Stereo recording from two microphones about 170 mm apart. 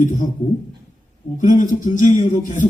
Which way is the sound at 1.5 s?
50° left (ahead or behind).